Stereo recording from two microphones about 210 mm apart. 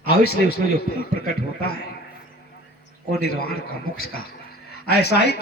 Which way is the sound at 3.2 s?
50° left (ahead or behind).